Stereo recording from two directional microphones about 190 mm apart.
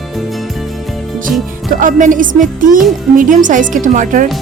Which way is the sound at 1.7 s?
45° right (ahead or behind).